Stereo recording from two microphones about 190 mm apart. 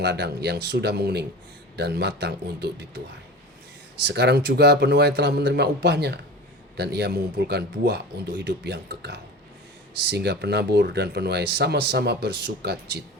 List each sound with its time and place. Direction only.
0.0 s speech: 60° right (ahead or behind)
4.0 s speech: 65° right (ahead or behind)